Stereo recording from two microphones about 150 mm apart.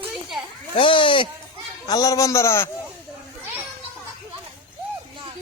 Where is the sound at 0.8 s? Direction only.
35° left (ahead or behind).